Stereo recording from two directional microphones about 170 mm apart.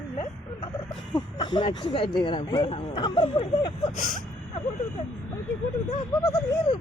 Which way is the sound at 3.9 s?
50° left (ahead or behind).